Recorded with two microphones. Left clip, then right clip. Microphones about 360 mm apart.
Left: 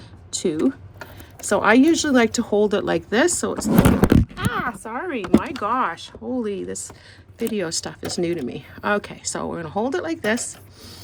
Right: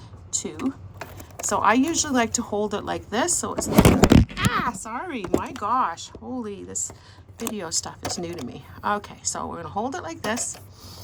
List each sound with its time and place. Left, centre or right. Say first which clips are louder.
0.3 s a sound: left 7 dB; centre
1.5 s a woman's voice: left 4 dB; centre
4.8 s speech: left 4 dB; right